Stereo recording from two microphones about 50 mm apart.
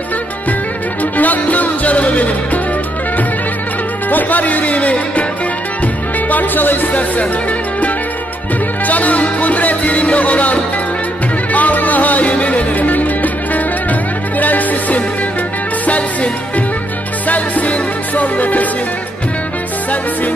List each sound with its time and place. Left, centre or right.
1.1 s music: left
4.1 s speech: left
6.3 s speech: left
8.8 s music: left